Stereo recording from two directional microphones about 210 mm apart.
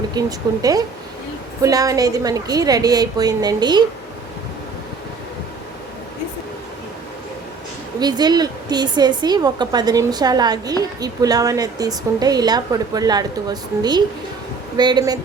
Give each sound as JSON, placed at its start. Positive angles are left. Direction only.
{"t": 0.1, "sound": "a woman's voice", "side_deg": -15}
{"t": 7.9, "sound": "speech", "side_deg": -20}